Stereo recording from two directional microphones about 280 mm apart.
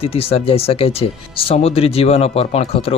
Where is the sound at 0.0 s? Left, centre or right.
Left.